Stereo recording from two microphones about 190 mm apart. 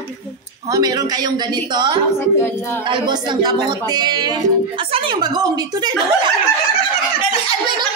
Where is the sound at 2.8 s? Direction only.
25° right (ahead or behind).